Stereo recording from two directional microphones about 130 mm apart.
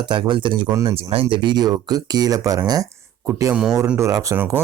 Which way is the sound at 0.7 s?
20° right (ahead or behind).